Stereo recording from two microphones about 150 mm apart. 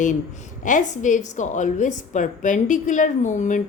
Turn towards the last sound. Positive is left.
turn(degrees=55)  # may be behind; listen again after turning